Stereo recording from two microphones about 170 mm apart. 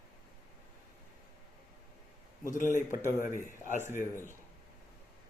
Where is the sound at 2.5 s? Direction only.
50° left (ahead or behind).